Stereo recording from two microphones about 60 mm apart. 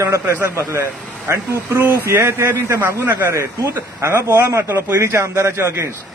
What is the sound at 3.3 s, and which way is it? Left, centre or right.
Speech, right.